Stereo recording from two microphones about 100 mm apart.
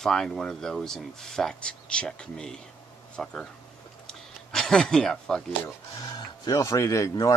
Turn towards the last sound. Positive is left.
turn(degrees=35)  # may be behind; listen again after turning